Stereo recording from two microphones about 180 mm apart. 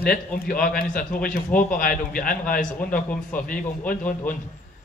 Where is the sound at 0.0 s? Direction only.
55° left (ahead or behind).